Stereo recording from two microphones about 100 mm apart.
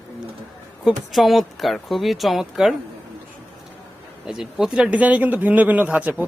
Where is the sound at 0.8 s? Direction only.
Centre (ahead or behind).